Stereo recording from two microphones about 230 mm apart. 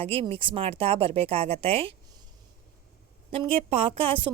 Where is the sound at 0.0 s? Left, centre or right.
Right.